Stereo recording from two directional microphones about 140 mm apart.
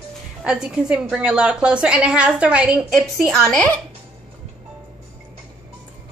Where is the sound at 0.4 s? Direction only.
5° right (ahead or behind).